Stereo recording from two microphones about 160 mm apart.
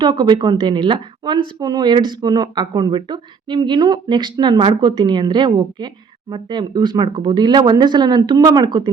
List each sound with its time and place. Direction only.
0.0 s speech: 25° right (ahead or behind)